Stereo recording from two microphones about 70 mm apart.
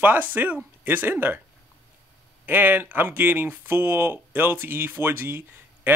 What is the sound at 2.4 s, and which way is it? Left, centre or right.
Speech, right.